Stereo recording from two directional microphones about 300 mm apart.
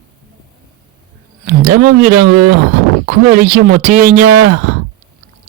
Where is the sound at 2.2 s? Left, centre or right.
Right.